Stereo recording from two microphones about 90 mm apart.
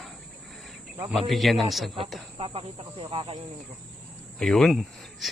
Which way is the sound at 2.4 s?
90° right.